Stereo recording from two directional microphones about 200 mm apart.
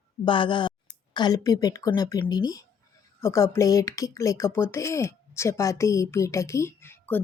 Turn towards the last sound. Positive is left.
turn(degrees=10)  # may be behind; listen again after turning